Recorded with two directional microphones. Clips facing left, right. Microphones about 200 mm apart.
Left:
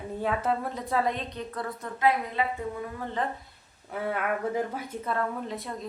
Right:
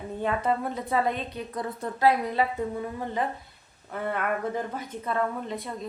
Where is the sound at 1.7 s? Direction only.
35° right (ahead or behind).